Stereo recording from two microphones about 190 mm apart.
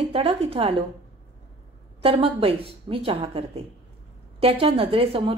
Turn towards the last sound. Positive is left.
turn(degrees=-30)  # may be behind; listen again after turning